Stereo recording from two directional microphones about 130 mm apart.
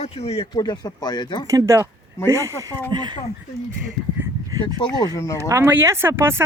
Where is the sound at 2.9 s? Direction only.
35° right (ahead or behind).